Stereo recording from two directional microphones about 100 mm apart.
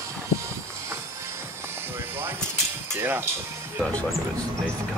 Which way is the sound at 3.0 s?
25° right (ahead or behind).